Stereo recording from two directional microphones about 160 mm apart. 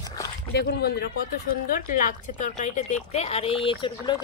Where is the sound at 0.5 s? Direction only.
90° left.